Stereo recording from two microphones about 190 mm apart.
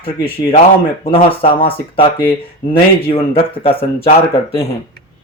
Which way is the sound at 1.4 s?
30° left (ahead or behind).